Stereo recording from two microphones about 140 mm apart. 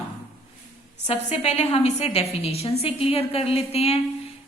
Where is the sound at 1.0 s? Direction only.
50° left (ahead or behind).